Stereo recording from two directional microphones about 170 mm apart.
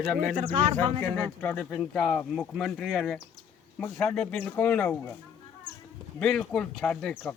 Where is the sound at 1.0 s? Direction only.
10° left (ahead or behind).